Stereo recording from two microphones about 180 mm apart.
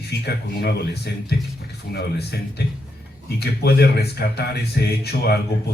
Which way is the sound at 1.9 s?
65° left (ahead or behind).